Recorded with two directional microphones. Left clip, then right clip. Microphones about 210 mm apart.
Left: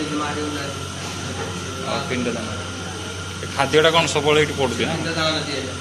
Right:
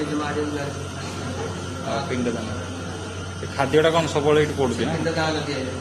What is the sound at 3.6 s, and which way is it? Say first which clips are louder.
A man's voice: left 3 dB; 15° right (ahead or behind).